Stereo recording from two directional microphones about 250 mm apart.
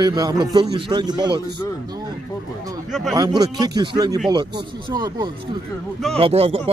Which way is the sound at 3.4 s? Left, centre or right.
Centre.